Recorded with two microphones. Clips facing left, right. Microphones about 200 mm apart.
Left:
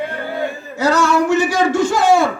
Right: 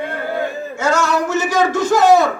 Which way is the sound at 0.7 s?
35° left (ahead or behind).